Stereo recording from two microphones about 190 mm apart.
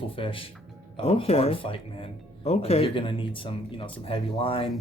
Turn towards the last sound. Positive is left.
turn(degrees=30)  # may be behind; listen again after turning